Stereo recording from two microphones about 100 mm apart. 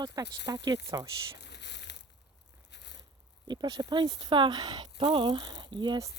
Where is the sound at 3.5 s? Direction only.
45° right (ahead or behind).